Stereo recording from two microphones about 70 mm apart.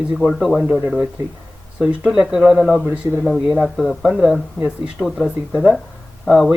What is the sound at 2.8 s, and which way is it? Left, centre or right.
Speech, centre.